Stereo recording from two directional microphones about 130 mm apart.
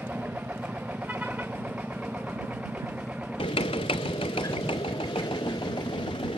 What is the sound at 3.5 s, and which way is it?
Engine, 45° left (ahead or behind).